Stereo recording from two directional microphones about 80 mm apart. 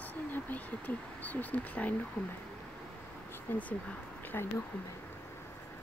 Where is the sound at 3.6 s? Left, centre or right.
Centre.